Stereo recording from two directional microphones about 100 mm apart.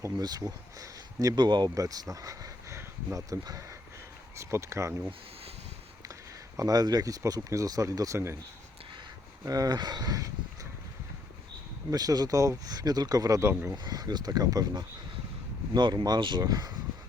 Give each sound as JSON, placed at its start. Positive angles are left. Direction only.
{"t": 0.0, "sound": "speech", "side_deg": -40}
{"t": 1.4, "sound": "speech", "side_deg": -50}
{"t": 1.7, "sound": "speech", "side_deg": -35}
{"t": 6.6, "sound": "speech", "side_deg": -40}
{"t": 9.4, "sound": "speech", "side_deg": -40}
{"t": 11.9, "sound": "speech", "side_deg": -40}
{"t": 13.7, "sound": "speech", "side_deg": -40}